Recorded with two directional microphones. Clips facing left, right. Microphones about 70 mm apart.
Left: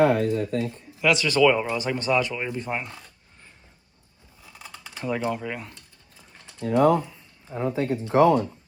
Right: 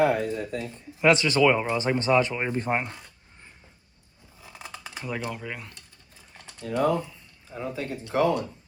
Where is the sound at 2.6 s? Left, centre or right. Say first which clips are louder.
Right 3 dB; right.